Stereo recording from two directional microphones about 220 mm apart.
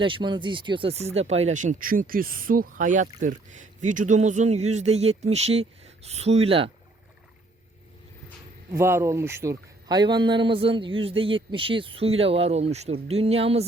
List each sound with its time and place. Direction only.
0.0 s a man's voice: 20° right (ahead or behind)
8.7 s a man's voice: 10° right (ahead or behind); by 13.7 s 25° right (ahead or behind)